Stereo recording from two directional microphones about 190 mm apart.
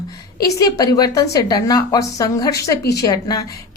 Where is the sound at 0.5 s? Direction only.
20° left (ahead or behind).